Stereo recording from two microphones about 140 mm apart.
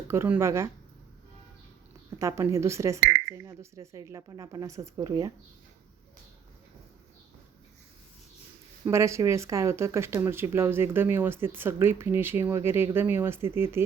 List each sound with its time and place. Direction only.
0.1 s a woman's voice: 20° right (ahead or behind)
2.0 s a woman's voice: 20° right (ahead or behind)
8.8 s speech: 20° right (ahead or behind)